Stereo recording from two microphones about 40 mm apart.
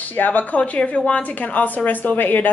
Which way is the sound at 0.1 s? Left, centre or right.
Left.